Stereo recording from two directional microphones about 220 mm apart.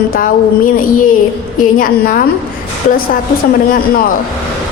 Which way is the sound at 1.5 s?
40° left (ahead or behind).